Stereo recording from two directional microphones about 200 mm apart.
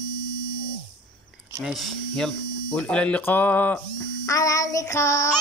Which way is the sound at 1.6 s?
Centre (ahead or behind).